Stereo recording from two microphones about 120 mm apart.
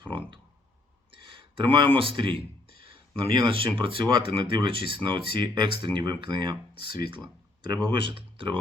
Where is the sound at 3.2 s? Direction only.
45° right (ahead or behind).